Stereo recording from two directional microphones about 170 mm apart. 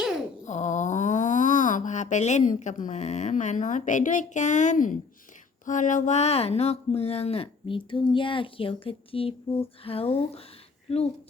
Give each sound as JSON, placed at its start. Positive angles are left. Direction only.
{"t": 0.4, "sound": "speech", "side_deg": 45}